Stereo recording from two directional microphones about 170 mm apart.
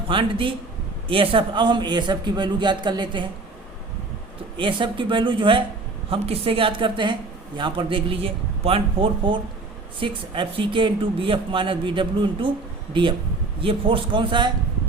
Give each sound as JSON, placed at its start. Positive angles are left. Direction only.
{"t": 0.1, "sound": "a man's voice", "side_deg": -30}
{"t": 4.5, "sound": "a man's voice", "side_deg": -30}